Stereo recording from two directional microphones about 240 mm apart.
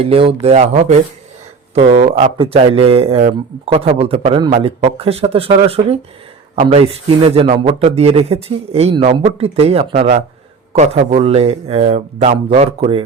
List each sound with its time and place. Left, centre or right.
0.0 s a man's voice: right